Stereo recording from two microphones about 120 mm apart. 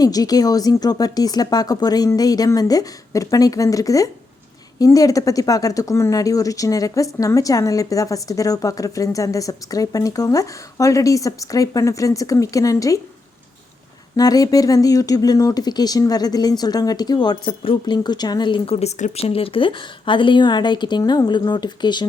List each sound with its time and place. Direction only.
0.0 s speech: 30° left (ahead or behind)
14.2 s speech: 30° left (ahead or behind); by 19.2 s 75° left (ahead or behind)
19.2 s speech: 50° left (ahead or behind)